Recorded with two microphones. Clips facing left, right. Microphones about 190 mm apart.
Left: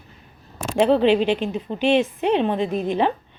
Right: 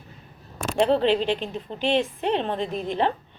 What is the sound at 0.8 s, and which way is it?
A woman's voice, 15° left (ahead or behind).